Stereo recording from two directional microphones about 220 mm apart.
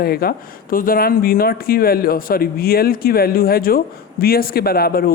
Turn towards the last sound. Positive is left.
turn(degrees=45)  # may be behind; listen again after turning